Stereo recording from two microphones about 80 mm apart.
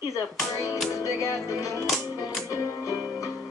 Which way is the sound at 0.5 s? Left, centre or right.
Left.